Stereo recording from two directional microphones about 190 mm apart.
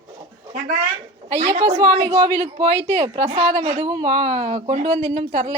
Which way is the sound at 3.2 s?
30° right (ahead or behind).